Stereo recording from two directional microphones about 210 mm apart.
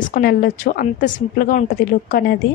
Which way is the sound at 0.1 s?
45° left (ahead or behind).